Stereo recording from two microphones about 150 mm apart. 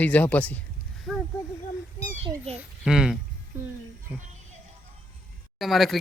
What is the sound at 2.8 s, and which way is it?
Speech, 5° right (ahead or behind).